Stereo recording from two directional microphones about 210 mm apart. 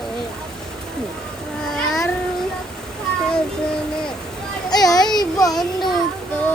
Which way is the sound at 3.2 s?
5° left (ahead or behind).